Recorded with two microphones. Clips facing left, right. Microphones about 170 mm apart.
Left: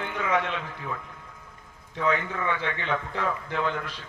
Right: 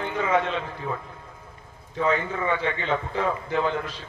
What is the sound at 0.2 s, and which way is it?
Speech, 30° right (ahead or behind).